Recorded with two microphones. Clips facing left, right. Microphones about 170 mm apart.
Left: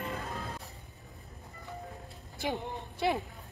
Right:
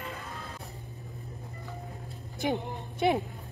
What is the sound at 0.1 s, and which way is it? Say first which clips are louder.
Music: left 3 dB; 35° left (ahead or behind).